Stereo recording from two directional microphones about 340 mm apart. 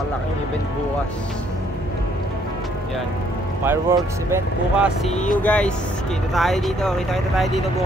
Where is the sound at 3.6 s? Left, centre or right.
Centre.